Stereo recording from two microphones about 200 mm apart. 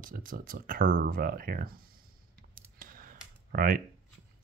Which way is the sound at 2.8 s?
45° right (ahead or behind).